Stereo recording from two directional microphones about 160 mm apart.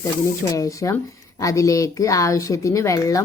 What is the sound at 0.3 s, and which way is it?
Speech, 20° left (ahead or behind).